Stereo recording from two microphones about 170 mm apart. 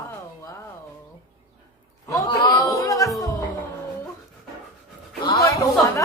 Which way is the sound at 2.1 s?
25° left (ahead or behind).